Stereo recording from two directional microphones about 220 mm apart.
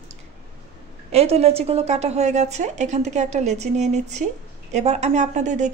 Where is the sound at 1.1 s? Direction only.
30° right (ahead or behind).